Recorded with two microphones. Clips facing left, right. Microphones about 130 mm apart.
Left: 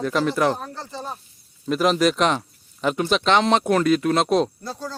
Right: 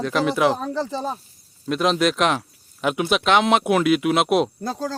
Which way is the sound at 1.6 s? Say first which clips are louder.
Left 1 dB; centre (ahead or behind).